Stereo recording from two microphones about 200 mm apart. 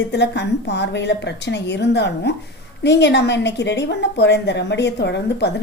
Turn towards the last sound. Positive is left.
turn(degrees=60)  # may be behind; listen again after turning